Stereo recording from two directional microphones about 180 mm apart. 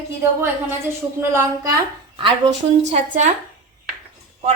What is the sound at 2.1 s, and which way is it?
A woman's voice, 35° right (ahead or behind).